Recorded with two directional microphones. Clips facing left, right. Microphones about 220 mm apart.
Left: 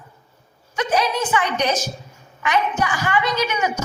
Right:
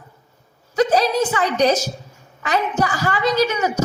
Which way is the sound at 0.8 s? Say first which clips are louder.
Right 5 dB; 40° right (ahead or behind).